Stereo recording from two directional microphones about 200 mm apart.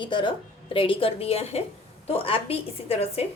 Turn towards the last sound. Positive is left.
turn(degrees=30)  # may be behind; listen again after turning